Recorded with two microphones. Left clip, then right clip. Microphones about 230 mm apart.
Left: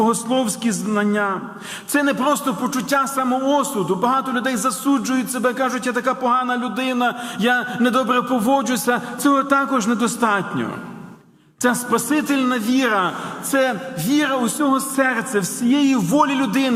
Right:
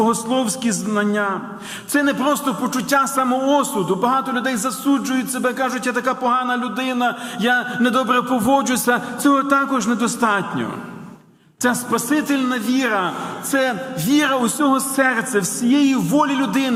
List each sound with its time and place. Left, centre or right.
0.0 s a man's voice: centre
11.6 s a man's voice: centre
13.5 s a man's voice: centre
14.0 s a man's voice: centre